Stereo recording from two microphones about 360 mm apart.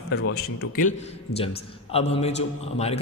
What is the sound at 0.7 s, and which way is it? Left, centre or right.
A man's voice, centre.